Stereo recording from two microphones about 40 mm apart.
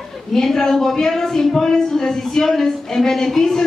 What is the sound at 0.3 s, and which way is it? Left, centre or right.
A woman's voice, centre.